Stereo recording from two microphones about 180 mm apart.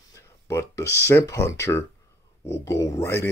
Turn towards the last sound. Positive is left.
turn(degrees=15)  # may be behind; listen again after turning